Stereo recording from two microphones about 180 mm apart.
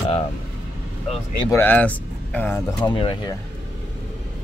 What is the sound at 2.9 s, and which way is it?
Speech, 30° left (ahead or behind).